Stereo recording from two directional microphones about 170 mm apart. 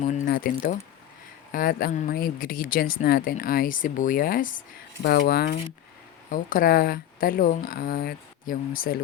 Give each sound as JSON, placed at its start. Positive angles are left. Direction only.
{"t": 0.0, "sound": "mechanisms", "side_deg": 45}
{"t": 0.3, "sound": "speech", "side_deg": 60}
{"t": 1.5, "sound": "speech", "side_deg": 55}
{"t": 5.0, "sound": "speech", "side_deg": 65}